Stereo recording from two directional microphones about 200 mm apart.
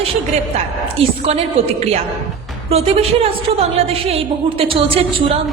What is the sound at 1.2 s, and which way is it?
A woman's voice, 30° right (ahead or behind).